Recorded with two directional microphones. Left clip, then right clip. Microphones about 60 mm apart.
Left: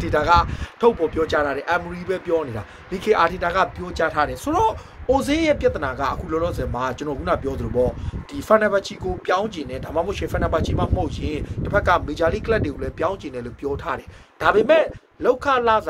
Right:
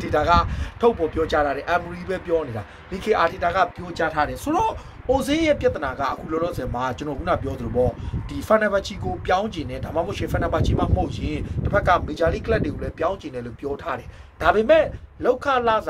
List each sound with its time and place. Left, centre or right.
0.0 s speech: left
2.3 s speech: left
11.7 s speech: left